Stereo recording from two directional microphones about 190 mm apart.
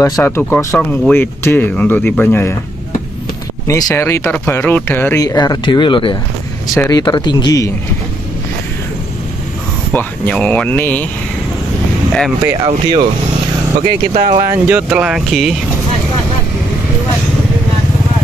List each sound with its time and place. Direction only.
0.0 s speech: 20° left (ahead or behind)
3.6 s speech: 15° left (ahead or behind)
9.9 s speech: 10° left (ahead or behind)
13.7 s speech: 45° right (ahead or behind)
14.4 s speech: 15° right (ahead or behind)